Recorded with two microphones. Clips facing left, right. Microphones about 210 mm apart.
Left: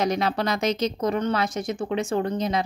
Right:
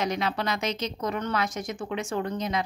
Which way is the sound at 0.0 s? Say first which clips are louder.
Left 4 dB; 35° left (ahead or behind).